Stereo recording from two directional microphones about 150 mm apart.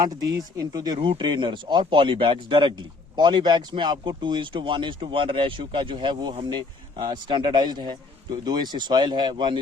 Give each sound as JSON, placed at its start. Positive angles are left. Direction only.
{"t": 0.0, "sound": "speech", "side_deg": -25}
{"t": 0.9, "sound": "speech", "side_deg": -40}